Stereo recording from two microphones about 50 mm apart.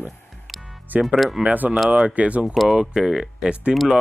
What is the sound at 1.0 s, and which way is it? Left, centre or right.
Speech, centre.